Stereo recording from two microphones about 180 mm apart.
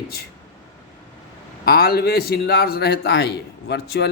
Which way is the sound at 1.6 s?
60° left (ahead or behind).